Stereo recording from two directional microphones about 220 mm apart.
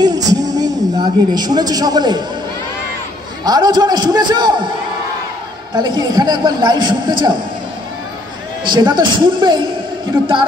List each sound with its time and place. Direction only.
0.0 s a sound: 15° right (ahead or behind)
3.4 s a man's voice: 20° right (ahead or behind)
5.8 s a man's voice: 20° right (ahead or behind)
8.6 s a man's voice: 20° right (ahead or behind)